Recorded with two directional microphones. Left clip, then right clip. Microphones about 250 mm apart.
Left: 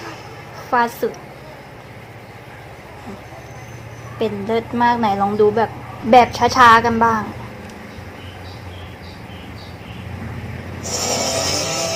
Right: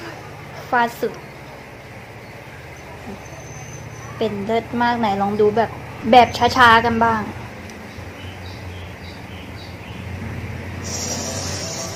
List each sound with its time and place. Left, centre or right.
0.7 s a woman's voice: centre
4.2 s a woman's voice: centre
11.0 s a sound: left